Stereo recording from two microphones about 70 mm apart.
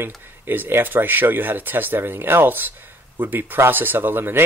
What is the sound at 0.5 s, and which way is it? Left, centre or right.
Speech, right.